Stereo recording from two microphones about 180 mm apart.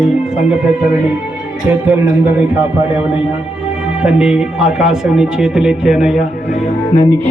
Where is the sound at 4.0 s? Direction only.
5° right (ahead or behind).